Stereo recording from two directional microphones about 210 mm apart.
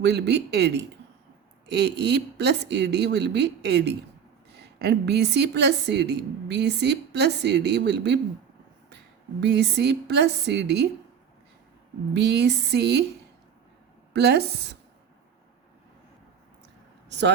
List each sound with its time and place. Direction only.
0.0 s a woman's voice: 55° right (ahead or behind)
9.4 s a woman's voice: 55° right (ahead or behind)
12.1 s speech: 55° right (ahead or behind)
14.1 s speech: 50° right (ahead or behind)
17.1 s a sound: 55° right (ahead or behind)